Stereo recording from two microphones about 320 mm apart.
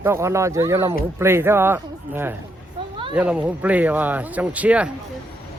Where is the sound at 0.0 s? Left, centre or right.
Centre.